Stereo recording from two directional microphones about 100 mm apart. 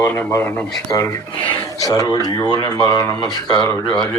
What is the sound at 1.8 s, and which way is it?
Speech, 35° left (ahead or behind).